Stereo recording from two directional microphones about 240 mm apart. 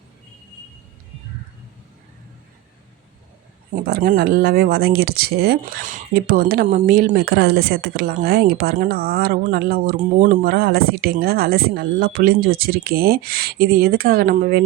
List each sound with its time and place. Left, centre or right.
3.8 s speech: right